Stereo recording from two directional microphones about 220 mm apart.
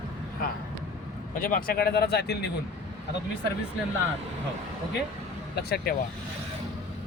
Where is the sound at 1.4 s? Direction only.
40° left (ahead or behind).